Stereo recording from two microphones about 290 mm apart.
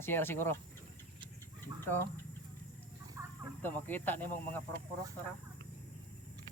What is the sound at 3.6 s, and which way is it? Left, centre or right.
Speech, centre.